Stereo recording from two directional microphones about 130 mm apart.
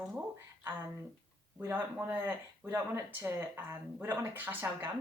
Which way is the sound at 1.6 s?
15° right (ahead or behind).